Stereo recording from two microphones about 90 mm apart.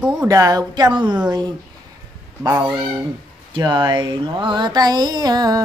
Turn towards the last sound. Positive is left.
turn(degrees=-45)  # may be behind; listen again after turning